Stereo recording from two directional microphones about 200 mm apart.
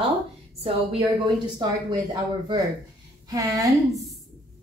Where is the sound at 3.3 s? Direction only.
15° right (ahead or behind).